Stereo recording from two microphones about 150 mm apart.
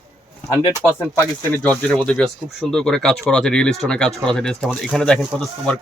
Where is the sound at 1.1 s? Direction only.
15° left (ahead or behind).